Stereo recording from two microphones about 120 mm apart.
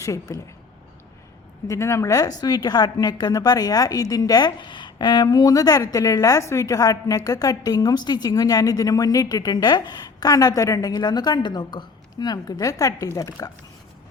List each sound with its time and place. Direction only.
0.0 s speech: 25° left (ahead or behind)
1.6 s a woman's voice: 25° left (ahead or behind)